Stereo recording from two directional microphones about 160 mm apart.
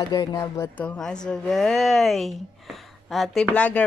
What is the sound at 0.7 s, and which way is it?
A woman's voice, 5° left (ahead or behind).